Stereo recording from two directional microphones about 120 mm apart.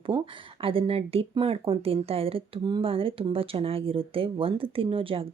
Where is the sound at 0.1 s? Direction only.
40° right (ahead or behind).